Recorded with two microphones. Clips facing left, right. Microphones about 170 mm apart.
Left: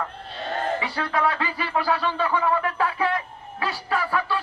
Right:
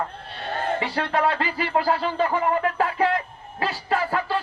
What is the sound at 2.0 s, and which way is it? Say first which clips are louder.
Speech: right 1 dB; 30° right (ahead or behind).